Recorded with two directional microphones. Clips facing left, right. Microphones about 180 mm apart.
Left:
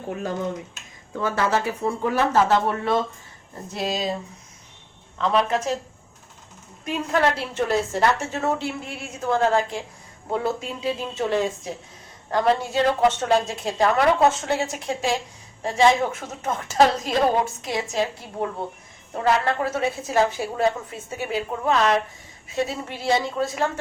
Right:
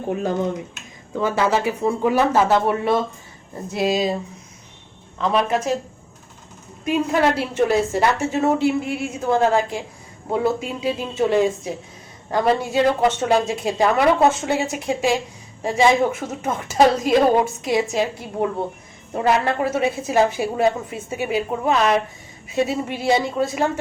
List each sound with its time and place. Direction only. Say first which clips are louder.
0.1 s a woman's voice: right 5 dB; 20° right (ahead or behind)
5.1 s a woman's voice: right 2 dB; 10° right (ahead or behind)
6.8 s a woman's voice: right 4 dB; 10° right (ahead or behind)